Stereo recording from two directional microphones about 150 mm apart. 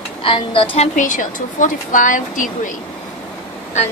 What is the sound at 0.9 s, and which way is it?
Speech, 60° left (ahead or behind).